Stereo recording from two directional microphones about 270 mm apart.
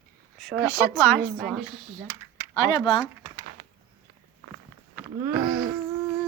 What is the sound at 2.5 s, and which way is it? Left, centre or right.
Speech, centre.